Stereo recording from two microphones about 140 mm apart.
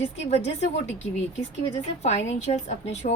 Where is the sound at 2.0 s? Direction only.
50° left (ahead or behind).